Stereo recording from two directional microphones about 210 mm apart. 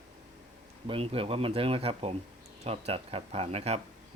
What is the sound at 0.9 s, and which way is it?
Speech, 25° right (ahead or behind).